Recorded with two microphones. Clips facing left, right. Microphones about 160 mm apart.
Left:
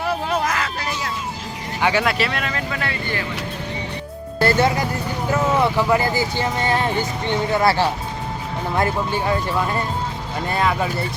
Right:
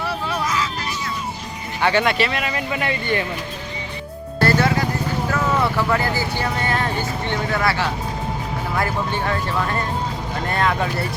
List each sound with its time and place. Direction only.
0.1 s vehicle: 55° left (ahead or behind)
1.8 s speech: 5° left (ahead or behind); by 3.2 s 20° right (ahead or behind)
4.4 s music: 20° left (ahead or behind)
5.3 s speech: 20° left (ahead or behind)
9.1 s speech: 15° left (ahead or behind)